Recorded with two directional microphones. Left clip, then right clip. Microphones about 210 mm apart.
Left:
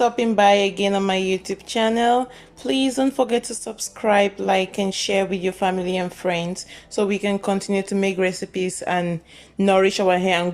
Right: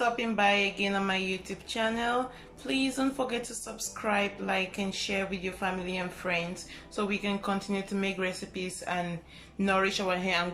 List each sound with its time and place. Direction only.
0.0 s speech: 35° left (ahead or behind)